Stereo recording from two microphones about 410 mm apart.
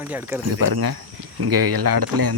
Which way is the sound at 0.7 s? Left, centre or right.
Right.